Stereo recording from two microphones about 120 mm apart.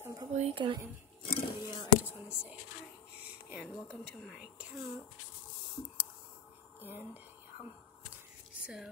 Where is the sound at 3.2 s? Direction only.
10° right (ahead or behind).